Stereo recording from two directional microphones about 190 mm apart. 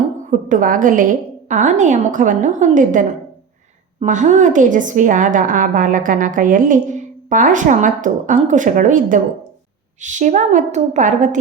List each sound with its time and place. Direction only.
0.3 s a woman's voice: 45° right (ahead or behind)